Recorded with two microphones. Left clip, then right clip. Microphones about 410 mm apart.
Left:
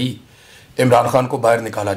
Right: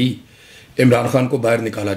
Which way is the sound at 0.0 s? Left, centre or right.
Left.